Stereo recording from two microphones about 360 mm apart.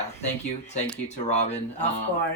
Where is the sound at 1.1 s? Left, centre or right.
Centre.